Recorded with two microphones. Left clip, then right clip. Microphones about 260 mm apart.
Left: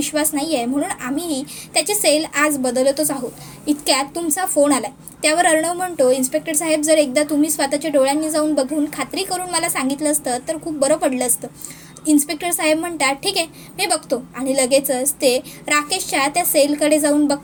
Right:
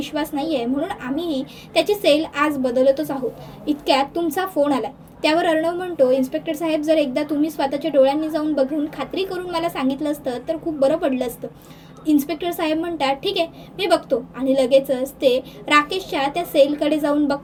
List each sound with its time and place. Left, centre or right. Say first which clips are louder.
0.3 s a woman's voice: left 2 dB; left